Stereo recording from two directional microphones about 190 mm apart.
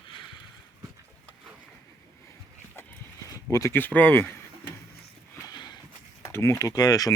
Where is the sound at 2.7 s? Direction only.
15° left (ahead or behind).